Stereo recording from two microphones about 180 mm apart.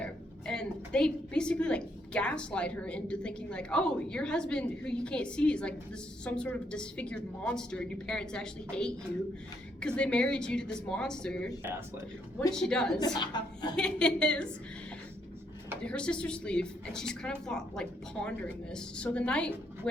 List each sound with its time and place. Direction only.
0.0 s a woman's voice: 5° left (ahead or behind)
12.5 s a woman's voice: 5° left (ahead or behind)
13.1 s a woman's voice: 25° left (ahead or behind)
13.7 s a woman's voice: 5° left (ahead or behind)
15.8 s a woman's voice: 5° left (ahead or behind)